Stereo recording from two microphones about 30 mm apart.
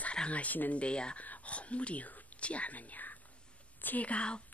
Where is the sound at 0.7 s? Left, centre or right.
Left.